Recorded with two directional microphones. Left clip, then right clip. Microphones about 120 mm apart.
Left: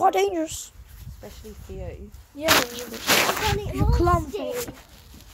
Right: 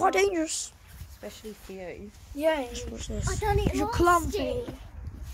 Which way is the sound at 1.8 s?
15° right (ahead or behind).